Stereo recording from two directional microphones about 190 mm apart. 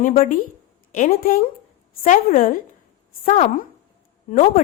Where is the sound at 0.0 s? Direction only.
40° left (ahead or behind).